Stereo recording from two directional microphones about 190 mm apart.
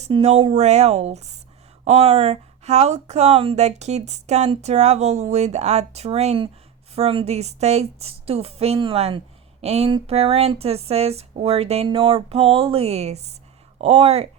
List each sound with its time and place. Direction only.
0.0 s a woman's voice: 35° right (ahead or behind)